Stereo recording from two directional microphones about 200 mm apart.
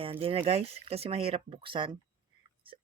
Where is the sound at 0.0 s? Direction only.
25° right (ahead or behind).